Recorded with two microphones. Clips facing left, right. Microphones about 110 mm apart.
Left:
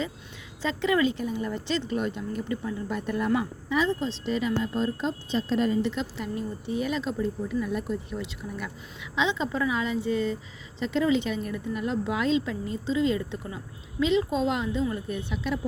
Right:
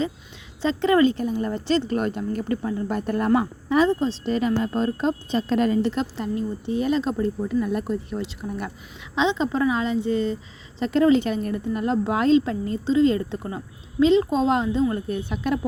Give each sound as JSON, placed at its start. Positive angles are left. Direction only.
{"t": 0.6, "sound": "a woman's voice", "side_deg": -35}
{"t": 1.9, "sound": "a woman's voice", "side_deg": -50}
{"t": 5.8, "sound": "a woman's voice", "side_deg": -40}
{"t": 10.8, "sound": "a woman's voice", "side_deg": -50}
{"t": 14.8, "sound": "a woman's voice", "side_deg": -45}